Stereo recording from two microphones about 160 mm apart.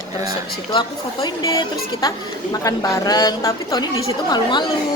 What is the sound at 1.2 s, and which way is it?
A woman's voice, 25° left (ahead or behind).